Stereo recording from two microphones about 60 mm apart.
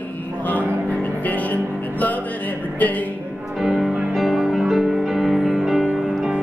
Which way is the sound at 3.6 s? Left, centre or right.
Centre.